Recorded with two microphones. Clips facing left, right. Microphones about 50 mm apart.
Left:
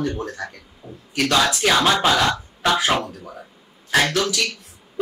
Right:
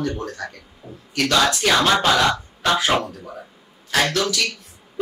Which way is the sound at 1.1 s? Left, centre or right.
Centre.